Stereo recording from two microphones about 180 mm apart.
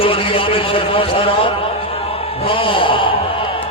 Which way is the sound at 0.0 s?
30° left (ahead or behind).